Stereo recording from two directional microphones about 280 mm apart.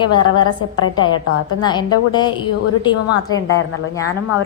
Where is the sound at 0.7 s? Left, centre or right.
Left.